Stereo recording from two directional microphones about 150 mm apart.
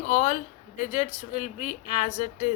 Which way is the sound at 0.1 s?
55° left (ahead or behind).